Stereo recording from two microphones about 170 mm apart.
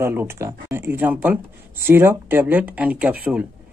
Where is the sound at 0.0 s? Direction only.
15° right (ahead or behind).